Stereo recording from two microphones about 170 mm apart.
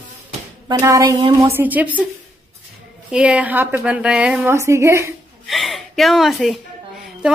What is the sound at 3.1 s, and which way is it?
A woman's voice, 5° right (ahead or behind).